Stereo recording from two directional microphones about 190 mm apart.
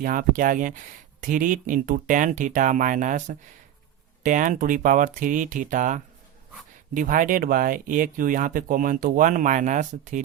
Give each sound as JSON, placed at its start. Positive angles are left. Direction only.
{"t": 0.0, "sound": "speech", "side_deg": -45}